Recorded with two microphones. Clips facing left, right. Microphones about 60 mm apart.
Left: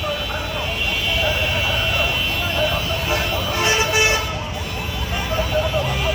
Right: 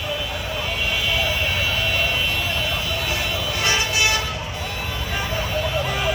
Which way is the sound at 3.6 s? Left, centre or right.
Left.